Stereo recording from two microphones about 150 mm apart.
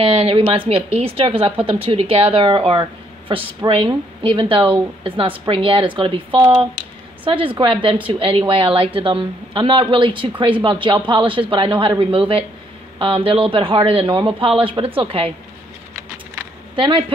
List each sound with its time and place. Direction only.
0.0 s a woman's voice: 40° right (ahead or behind)
16.7 s speech: 35° right (ahead or behind)